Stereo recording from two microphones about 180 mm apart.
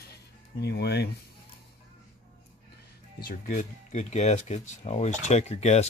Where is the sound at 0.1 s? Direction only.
65° left (ahead or behind).